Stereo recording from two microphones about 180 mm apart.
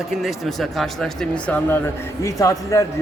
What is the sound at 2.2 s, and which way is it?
Speech, 20° left (ahead or behind).